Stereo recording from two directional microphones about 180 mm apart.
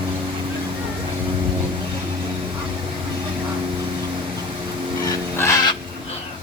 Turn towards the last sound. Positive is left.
turn(degrees=15)  # may be behind; listen again after turning